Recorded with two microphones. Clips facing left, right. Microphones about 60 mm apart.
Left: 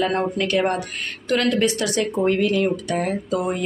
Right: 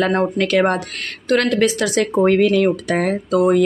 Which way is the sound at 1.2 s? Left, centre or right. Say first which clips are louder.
Right 4 dB; right.